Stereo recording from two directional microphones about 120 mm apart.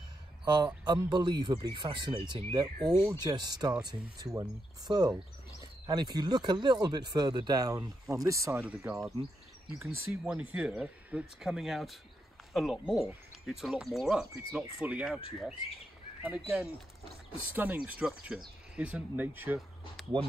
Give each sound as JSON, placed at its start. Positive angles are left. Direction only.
{"t": 0.8, "sound": "speech", "side_deg": -35}
{"t": 9.8, "sound": "speech", "side_deg": -15}
{"t": 16.3, "sound": "speech", "side_deg": -5}